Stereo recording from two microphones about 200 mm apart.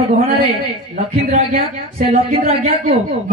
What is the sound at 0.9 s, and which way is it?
A woman's voice, 35° right (ahead or behind).